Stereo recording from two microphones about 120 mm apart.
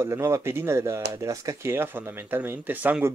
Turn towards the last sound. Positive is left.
turn(degrees=-15)  # may be behind; listen again after turning